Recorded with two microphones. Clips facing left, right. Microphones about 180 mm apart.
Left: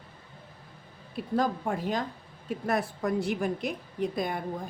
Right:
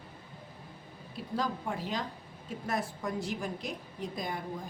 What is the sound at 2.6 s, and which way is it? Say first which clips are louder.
A woman's voice: left 6 dB; 60° left (ahead or behind).